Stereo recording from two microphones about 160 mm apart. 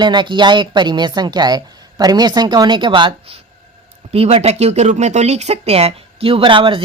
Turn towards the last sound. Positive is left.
turn(degrees=-30)  # may be behind; listen again after turning